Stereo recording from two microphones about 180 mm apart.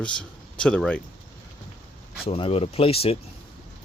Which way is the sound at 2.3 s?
30° left (ahead or behind).